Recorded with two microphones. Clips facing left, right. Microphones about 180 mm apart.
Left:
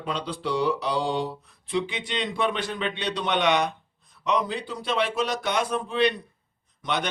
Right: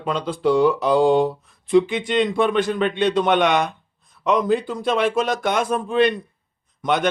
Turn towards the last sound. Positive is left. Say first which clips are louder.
# right 8 dB
turn(degrees=-50)  # may be behind; listen again after turning